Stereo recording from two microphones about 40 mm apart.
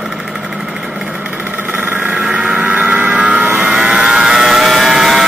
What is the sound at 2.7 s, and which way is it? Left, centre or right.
Vehicle, right.